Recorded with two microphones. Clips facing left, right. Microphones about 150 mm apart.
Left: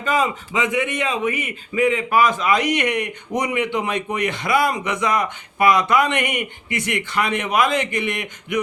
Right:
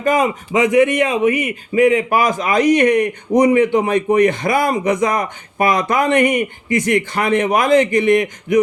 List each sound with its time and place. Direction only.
0.0 s a man's voice: 45° right (ahead or behind)
3.4 s speech: 35° right (ahead or behind)
4.7 s speech: 40° right (ahead or behind)